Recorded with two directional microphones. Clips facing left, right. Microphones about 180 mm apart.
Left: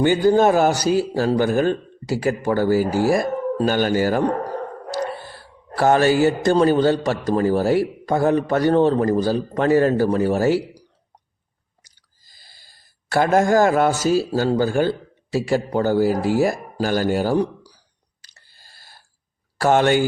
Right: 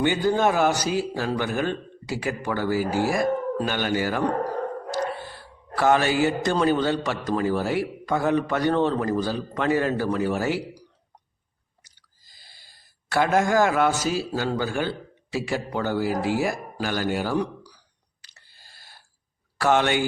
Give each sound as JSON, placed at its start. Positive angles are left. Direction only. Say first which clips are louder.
{"t": 0.0, "sound": "a man's voice", "louder": "left 6 dB", "side_deg": 40}
{"t": 5.7, "sound": "a man's voice", "louder": "left 4 dB", "side_deg": 40}
{"t": 12.4, "sound": "speech", "louder": "left 1 dB", "side_deg": 40}
{"t": 18.2, "sound": "a sound", "louder": "left 1 dB", "side_deg": 40}
{"t": 19.5, "sound": "speech", "louder": "left 5 dB", "side_deg": 40}